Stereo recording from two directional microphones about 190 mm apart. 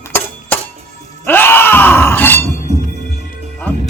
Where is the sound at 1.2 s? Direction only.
10° left (ahead or behind).